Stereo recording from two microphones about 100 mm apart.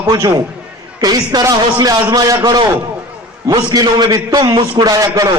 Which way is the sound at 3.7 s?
40° right (ahead or behind).